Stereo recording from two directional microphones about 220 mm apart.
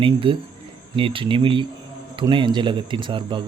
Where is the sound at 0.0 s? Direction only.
25° right (ahead or behind).